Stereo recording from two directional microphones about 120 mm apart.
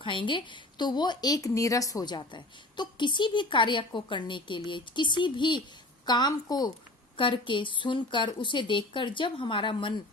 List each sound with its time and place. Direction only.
0.0 s a woman's voice: 45° left (ahead or behind)
7.2 s a woman's voice: 45° left (ahead or behind)